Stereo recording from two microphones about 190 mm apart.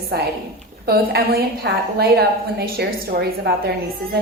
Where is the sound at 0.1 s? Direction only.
60° right (ahead or behind).